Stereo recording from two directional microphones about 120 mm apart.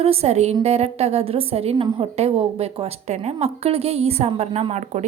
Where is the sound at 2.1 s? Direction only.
55° right (ahead or behind).